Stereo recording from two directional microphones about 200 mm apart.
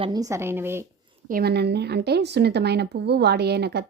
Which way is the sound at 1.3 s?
50° right (ahead or behind).